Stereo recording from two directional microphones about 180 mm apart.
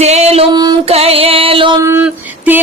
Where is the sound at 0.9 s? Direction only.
35° right (ahead or behind).